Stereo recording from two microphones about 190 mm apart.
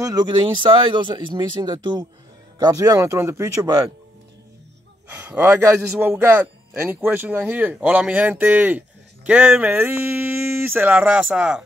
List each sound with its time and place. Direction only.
0.0 s a man's voice: 20° right (ahead or behind)
5.1 s a man's voice: 10° right (ahead or behind)